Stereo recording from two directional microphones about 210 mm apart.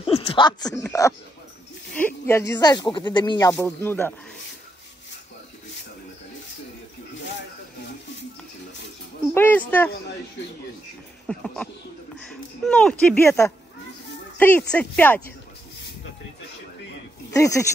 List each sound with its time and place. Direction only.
0.0 s speech: 25° left (ahead or behind)
1.9 s speech: 10° left (ahead or behind)
9.3 s speech: 10° left (ahead or behind)
11.2 s speech: 5° left (ahead or behind)
17.3 s speech: 15° left (ahead or behind)